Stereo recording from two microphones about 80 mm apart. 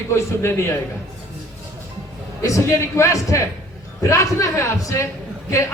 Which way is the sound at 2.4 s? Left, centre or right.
Left.